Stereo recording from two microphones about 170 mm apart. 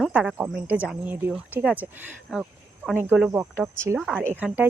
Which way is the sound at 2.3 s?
Centre (ahead or behind).